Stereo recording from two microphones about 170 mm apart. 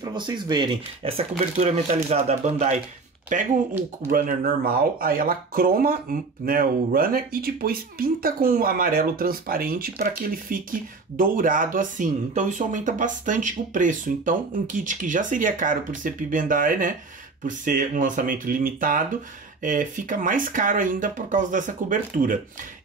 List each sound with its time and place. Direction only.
0.0 s speech: 25° right (ahead or behind); by 22.4 s 50° right (ahead or behind)